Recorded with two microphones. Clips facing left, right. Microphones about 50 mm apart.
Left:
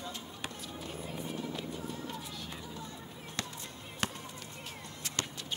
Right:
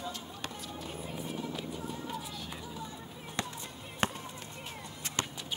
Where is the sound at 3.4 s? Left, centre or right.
Right.